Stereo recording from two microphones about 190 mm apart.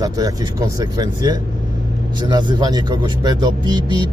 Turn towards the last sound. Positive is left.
turn(degrees=-20)  # may be behind; listen again after turning